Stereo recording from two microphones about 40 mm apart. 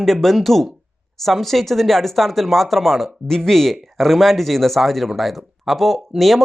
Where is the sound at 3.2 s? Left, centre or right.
Centre.